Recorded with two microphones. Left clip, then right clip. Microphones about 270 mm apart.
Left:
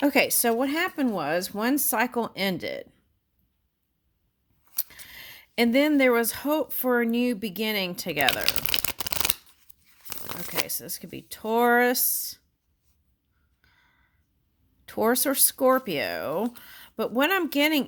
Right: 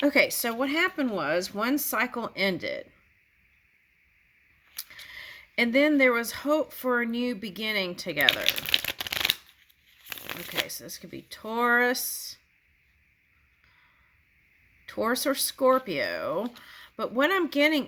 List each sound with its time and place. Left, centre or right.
0.0 s speech: left
4.8 s speech: left
14.8 s speech: left